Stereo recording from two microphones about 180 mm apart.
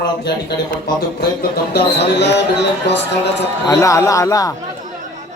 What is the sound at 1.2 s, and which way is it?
Speech, 65° left (ahead or behind).